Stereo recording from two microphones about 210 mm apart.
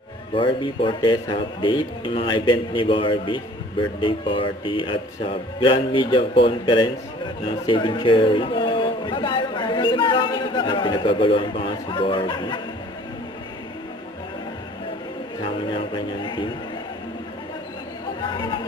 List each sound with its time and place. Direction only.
0.3 s a man's voice: 25° left (ahead or behind)
15.4 s music: 25° left (ahead or behind)
18.2 s chatter: 20° left (ahead or behind)